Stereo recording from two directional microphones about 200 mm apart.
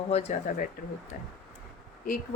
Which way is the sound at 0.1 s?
35° left (ahead or behind).